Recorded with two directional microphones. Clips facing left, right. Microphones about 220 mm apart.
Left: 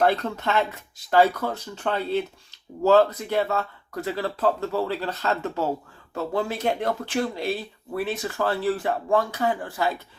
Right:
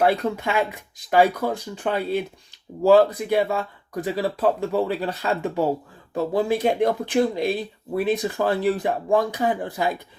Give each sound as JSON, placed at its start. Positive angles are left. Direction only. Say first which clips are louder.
{"t": 0.0, "sound": "speech", "louder": "right 2 dB", "side_deg": -10}